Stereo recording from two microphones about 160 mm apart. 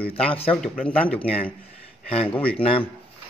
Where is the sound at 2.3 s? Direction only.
5° left (ahead or behind).